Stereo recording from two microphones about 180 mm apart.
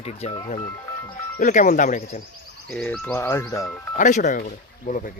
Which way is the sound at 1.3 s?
45° left (ahead or behind).